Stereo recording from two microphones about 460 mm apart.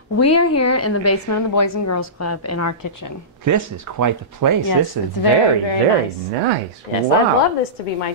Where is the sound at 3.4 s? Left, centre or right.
Right.